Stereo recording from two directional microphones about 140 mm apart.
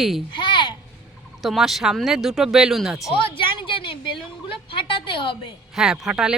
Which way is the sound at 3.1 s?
40° left (ahead or behind).